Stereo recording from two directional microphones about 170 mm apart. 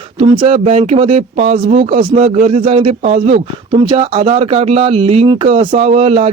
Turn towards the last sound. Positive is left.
turn(degrees=-35)  # may be behind; listen again after turning